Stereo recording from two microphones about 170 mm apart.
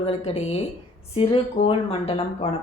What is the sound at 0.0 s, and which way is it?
Speech, 35° left (ahead or behind).